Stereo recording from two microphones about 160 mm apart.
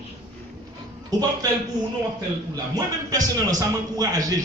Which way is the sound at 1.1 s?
25° right (ahead or behind).